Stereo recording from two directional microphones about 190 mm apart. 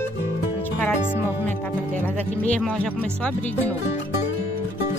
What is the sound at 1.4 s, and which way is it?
Speech, 10° left (ahead or behind).